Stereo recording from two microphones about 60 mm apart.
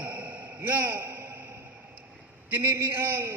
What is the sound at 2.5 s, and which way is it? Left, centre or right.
Speech, right.